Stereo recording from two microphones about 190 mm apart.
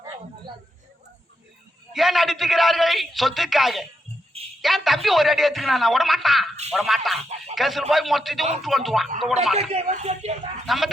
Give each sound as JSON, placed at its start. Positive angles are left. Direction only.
{"t": 1.9, "sound": "a man's voice", "side_deg": 0}
{"t": 9.6, "sound": "speech", "side_deg": -35}
{"t": 10.7, "sound": "a man's voice", "side_deg": 0}